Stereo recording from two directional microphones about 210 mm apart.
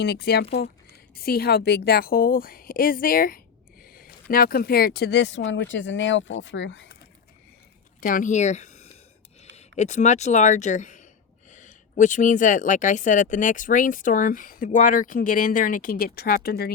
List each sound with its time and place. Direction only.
0.0 s a woman's voice: 50° left (ahead or behind)
8.0 s speech: 40° left (ahead or behind)